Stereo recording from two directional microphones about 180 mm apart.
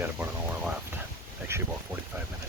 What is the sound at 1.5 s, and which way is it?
Speech, 15° right (ahead or behind).